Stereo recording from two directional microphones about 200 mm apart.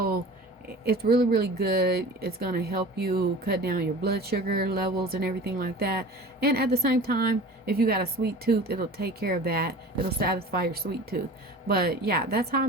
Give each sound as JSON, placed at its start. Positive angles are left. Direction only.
{"t": 0.9, "sound": "speech", "side_deg": -50}